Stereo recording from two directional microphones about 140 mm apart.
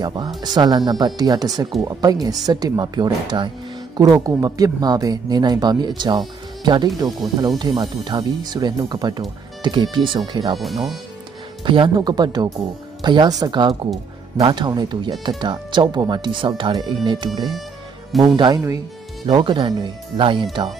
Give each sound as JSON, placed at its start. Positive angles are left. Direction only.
{"t": 0.0, "sound": "speech", "side_deg": -30}
{"t": 10.6, "sound": "speech", "side_deg": 0}
{"t": 11.6, "sound": "speech", "side_deg": -35}